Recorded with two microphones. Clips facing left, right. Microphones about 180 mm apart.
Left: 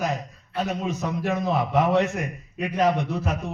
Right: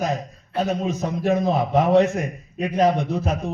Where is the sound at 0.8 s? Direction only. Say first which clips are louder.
Right 3 dB; 45° right (ahead or behind).